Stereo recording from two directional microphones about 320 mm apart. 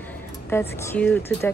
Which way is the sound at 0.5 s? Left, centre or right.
Centre.